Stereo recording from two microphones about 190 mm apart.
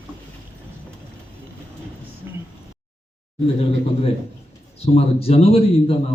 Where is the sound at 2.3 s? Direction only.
15° right (ahead or behind).